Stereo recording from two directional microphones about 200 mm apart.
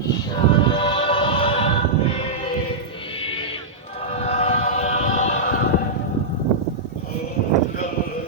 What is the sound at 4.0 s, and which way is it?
Choir, 30° left (ahead or behind).